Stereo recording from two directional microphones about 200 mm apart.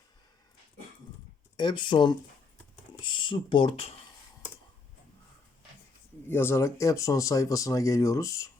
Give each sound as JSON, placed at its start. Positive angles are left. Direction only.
{"t": 1.5, "sound": "speech", "side_deg": 25}
{"t": 6.2, "sound": "speech", "side_deg": 10}